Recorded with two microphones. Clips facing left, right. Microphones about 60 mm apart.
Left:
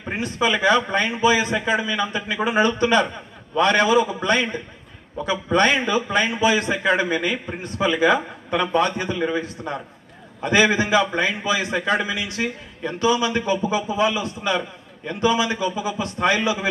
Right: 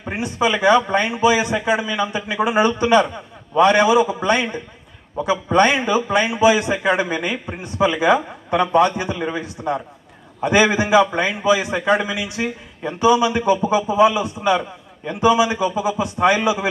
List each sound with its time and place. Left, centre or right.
0.0 s a man's voice: centre